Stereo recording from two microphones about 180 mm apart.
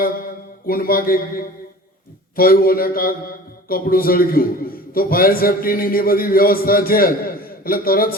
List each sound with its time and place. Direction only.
0.7 s a man's voice: 55° left (ahead or behind)